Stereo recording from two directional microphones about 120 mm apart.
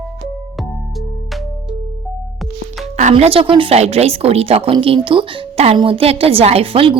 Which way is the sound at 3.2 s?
50° right (ahead or behind).